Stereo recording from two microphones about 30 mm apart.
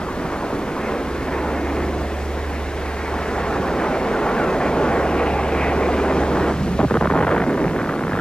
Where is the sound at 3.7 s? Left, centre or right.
Left.